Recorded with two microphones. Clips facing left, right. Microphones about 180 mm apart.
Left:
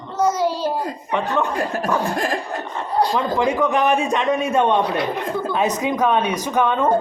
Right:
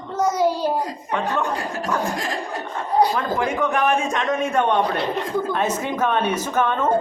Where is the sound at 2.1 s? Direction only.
55° left (ahead or behind).